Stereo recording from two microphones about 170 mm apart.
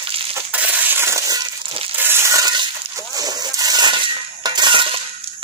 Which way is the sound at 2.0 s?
15° right (ahead or behind).